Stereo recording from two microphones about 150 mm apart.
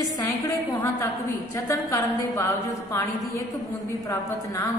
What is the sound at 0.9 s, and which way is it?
A woman's voice, 15° left (ahead or behind).